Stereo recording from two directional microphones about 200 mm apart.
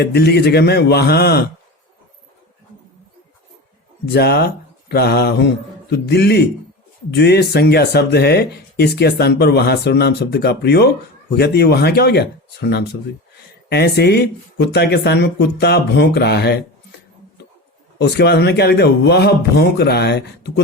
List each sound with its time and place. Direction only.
0.0 s speech: 55° left (ahead or behind)
4.0 s speech: 55° left (ahead or behind)
18.0 s speech: 55° left (ahead or behind)